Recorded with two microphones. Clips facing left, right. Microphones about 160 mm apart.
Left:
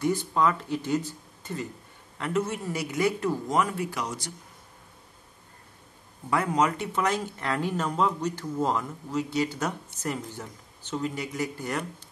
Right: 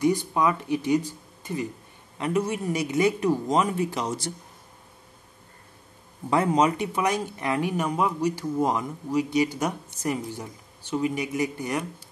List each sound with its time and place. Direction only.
0.0 s speech: 15° right (ahead or behind)
6.3 s speech: 20° right (ahead or behind)